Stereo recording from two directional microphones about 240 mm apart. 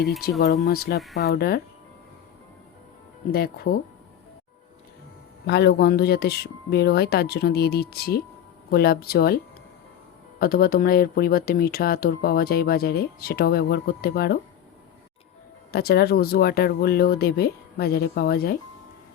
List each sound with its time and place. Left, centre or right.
0.3 s speech: left
0.9 s speech: centre
1.3 s speech: left
3.3 s speech: left
5.5 s speech: left
10.4 s speech: left
15.7 s speech: left